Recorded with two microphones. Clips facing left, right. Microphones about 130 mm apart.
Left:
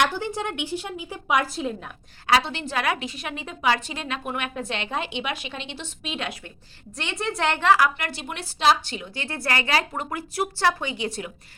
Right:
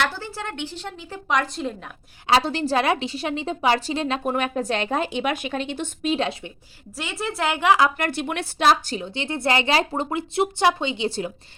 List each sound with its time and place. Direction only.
0.0 s a woman's voice: 15° left (ahead or behind)
2.4 s a woman's voice: 40° right (ahead or behind)
6.9 s a woman's voice: 5° right (ahead or behind)
7.9 s a woman's voice: 50° right (ahead or behind)
8.9 s speech: 30° right (ahead or behind)